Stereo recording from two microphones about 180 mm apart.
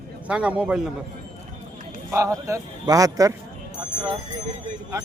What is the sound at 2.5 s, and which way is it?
Speech, 20° right (ahead or behind).